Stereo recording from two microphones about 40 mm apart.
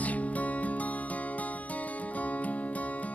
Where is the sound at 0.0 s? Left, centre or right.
Left.